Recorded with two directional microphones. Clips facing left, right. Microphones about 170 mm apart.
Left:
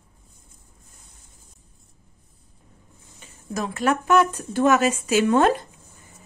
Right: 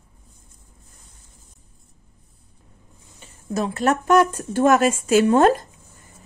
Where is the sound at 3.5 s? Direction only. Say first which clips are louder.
Right 2 dB; 30° right (ahead or behind).